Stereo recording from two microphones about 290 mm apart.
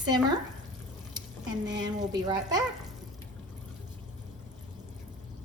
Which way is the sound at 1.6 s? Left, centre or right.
Centre.